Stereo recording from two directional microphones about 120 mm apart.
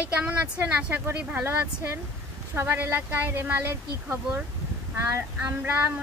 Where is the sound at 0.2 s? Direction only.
10° right (ahead or behind).